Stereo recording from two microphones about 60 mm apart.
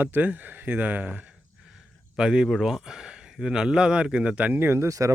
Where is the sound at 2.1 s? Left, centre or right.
Centre.